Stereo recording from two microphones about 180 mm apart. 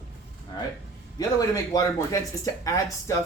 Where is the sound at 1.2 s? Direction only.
20° left (ahead or behind).